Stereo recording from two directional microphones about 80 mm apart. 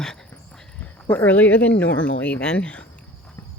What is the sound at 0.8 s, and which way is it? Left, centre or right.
Speech, left.